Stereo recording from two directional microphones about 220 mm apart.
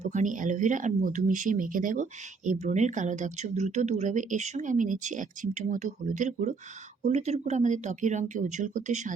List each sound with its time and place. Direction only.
0.0 s speech: 35° right (ahead or behind)